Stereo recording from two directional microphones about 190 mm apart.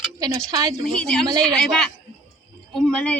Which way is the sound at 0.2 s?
20° right (ahead or behind).